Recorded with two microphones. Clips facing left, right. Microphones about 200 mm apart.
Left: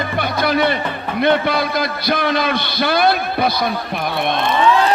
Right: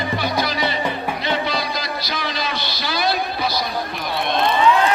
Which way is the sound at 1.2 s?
55° left (ahead or behind).